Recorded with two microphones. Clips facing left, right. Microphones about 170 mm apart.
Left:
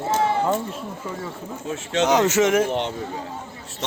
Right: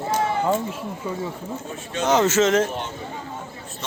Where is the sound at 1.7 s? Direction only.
80° left.